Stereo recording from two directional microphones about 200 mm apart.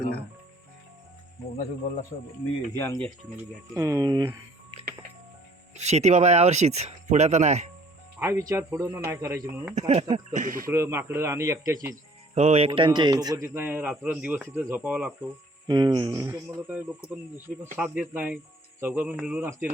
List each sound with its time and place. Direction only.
2.7 s speech: 10° left (ahead or behind)
3.8 s a man's voice: 15° right (ahead or behind)
5.7 s speech: 35° right (ahead or behind)
8.2 s a man's voice: 15° right (ahead or behind)
9.7 s speech: 30° right (ahead or behind)
10.7 s a man's voice: 15° right (ahead or behind)
12.3 s a man's voice: 30° right (ahead or behind); by 15.1 s 5° right (ahead or behind)
15.6 s a man's voice: 20° right (ahead or behind)